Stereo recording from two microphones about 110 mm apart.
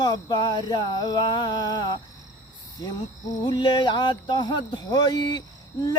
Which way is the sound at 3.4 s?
40° left (ahead or behind).